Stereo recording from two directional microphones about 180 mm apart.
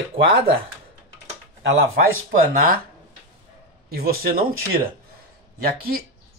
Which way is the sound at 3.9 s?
55° right (ahead or behind).